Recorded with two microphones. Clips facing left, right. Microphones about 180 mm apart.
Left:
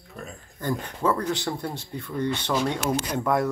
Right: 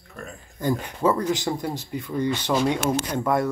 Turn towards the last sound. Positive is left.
turn(degrees=0)  # may be behind; listen again after turning